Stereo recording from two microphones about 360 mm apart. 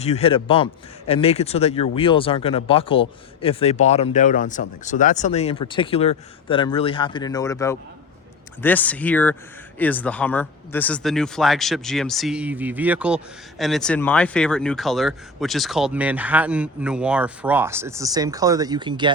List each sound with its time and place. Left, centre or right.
0.0 s speech: centre